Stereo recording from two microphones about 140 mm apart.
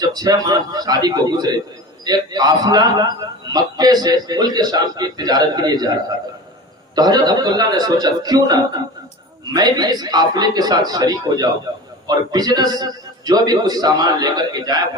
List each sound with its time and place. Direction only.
0.0 s a man's voice: 30° right (ahead or behind)
6.9 s a man's voice: 30° right (ahead or behind)